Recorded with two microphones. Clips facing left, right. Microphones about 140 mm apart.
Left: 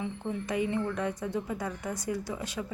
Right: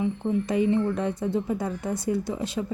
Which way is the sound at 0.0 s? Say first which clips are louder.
Right 8 dB; 30° right (ahead or behind).